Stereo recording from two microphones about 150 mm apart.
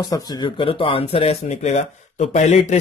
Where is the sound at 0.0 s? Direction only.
25° left (ahead or behind).